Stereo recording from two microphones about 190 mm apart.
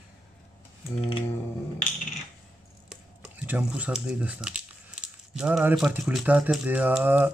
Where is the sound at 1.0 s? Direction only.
30° left (ahead or behind).